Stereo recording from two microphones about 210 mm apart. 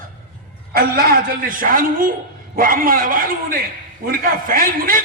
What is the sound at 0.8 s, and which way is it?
A man's voice, 45° right (ahead or behind).